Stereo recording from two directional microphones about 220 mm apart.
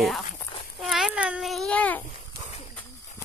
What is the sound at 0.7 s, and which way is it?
Babbling, centre (ahead or behind).